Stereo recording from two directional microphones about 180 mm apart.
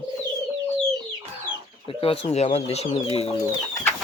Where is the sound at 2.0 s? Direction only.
35° left (ahead or behind).